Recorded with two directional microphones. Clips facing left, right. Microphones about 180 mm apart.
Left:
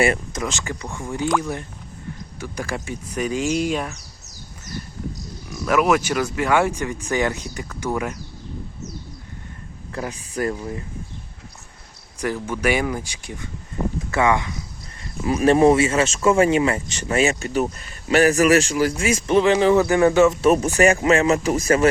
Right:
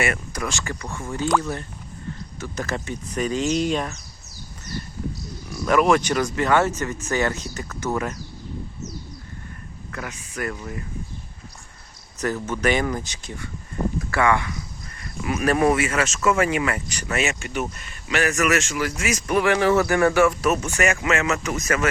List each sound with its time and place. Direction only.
0.0 s speech: 25° left (ahead or behind); by 3.9 s 10° left (ahead or behind)
5.5 s speech: 5° left (ahead or behind)
9.9 s speech: 30° left (ahead or behind)
12.2 s speech: 10° left (ahead or behind)
15.2 s speech: 30° left (ahead or behind)